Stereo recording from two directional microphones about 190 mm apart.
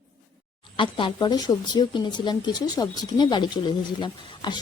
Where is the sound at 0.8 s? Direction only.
25° left (ahead or behind).